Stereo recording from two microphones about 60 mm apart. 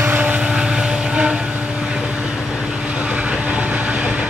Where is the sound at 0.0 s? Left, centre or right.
Right.